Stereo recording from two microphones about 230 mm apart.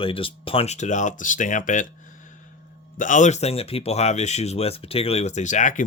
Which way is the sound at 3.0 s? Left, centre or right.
Left.